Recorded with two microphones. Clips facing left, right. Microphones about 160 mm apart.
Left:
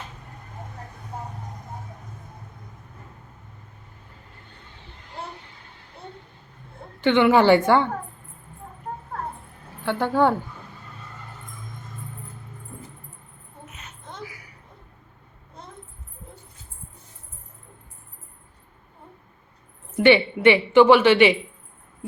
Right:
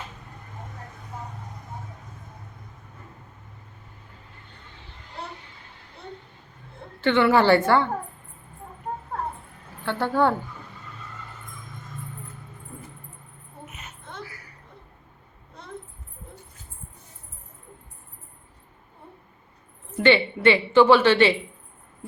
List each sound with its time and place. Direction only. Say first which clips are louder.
7.0 s a woman's voice: left 2 dB; 15° left (ahead or behind)
9.8 s a woman's voice: left 2 dB; 15° left (ahead or behind)
14.3 s a sound: even; 10° left (ahead or behind)
20.0 s a woman's voice: left 3 dB; 15° left (ahead or behind)